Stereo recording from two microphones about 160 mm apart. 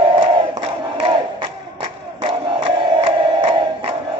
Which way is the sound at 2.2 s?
30° right (ahead or behind).